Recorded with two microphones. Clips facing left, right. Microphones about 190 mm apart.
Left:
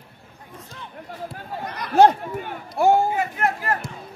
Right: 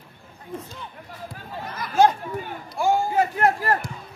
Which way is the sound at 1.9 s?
65° left (ahead or behind).